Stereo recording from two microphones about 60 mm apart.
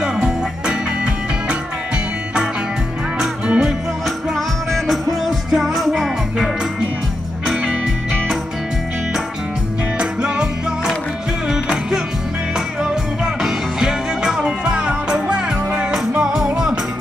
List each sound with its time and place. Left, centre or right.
0.0 s music: centre
3.2 s music: centre
4.7 s music: centre
9.9 s music: centre